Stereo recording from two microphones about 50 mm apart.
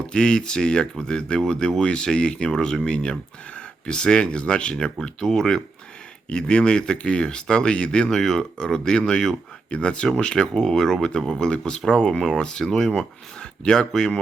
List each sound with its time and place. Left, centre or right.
0.1 s speech: centre